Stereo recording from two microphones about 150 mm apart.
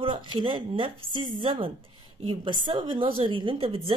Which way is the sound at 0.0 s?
35° right (ahead or behind).